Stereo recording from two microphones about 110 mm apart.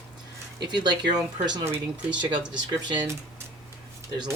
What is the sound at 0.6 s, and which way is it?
Speech, 40° right (ahead or behind).